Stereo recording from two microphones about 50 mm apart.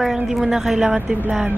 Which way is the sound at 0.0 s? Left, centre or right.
Centre.